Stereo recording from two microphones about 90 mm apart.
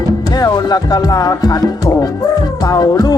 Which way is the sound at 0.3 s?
45° left (ahead or behind).